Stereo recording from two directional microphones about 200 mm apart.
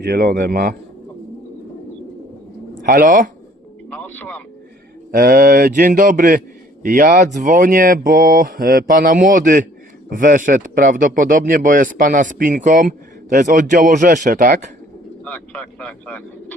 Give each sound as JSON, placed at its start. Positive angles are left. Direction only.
{"t": 0.0, "sound": "speech", "side_deg": -50}
{"t": 2.8, "sound": "speech", "side_deg": -40}
{"t": 3.8, "sound": "a sound", "side_deg": 10}
{"t": 5.1, "sound": "speech", "side_deg": -45}
{"t": 15.2, "sound": "speech", "side_deg": 5}